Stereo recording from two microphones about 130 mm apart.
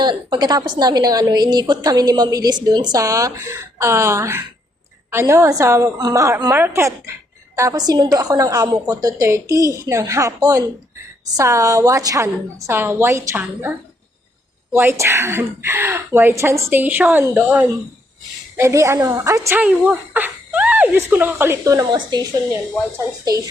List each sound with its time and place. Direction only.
0.0 s a woman's voice: 35° right (ahead or behind)
19.5 s speech: 10° right (ahead or behind); by 22.2 s 30° right (ahead or behind)